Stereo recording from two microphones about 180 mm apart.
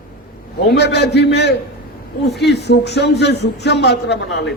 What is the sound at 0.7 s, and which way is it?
A man's voice, 70° left (ahead or behind).